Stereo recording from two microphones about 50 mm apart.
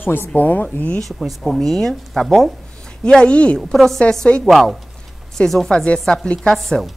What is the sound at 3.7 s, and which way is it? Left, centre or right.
Speech, centre.